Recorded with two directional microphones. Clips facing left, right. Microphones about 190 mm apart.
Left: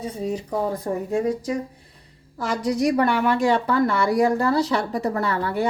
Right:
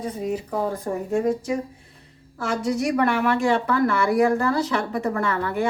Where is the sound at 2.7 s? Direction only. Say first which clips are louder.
Left 3 dB; 35° left (ahead or behind).